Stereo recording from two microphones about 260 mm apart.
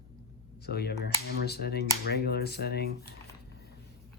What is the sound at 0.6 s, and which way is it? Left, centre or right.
Speech, left.